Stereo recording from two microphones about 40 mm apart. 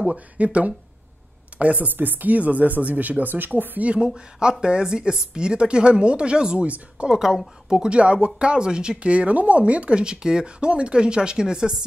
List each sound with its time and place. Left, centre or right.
0.4 s speech: right
1.9 s speech: right
3.8 s speech: right
6.6 s speech: right
7.1 s speech: centre
7.9 s speech: right
9.1 s speech: right; by 11.7 s centre